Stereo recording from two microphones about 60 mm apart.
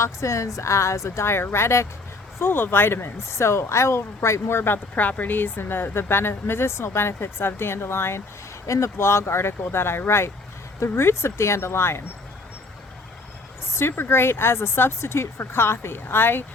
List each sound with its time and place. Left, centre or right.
0.0 s a woman's voice: left
2.4 s speech: left
8.6 s a woman's voice: left
13.7 s a woman's voice: left